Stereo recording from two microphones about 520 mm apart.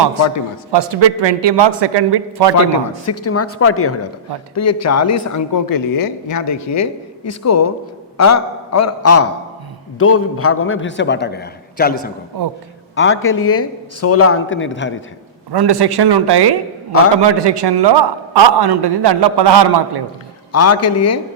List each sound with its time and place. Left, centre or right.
0.7 s a man's voice: right
3.1 s a man's voice: left
15.5 s a man's voice: right
20.5 s a man's voice: left